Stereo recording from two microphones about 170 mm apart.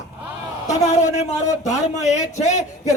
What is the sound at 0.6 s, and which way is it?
Speech, 45° left (ahead or behind).